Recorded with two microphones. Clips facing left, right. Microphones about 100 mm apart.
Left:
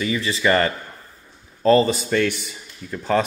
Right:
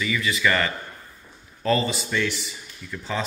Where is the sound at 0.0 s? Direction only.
30° left (ahead or behind).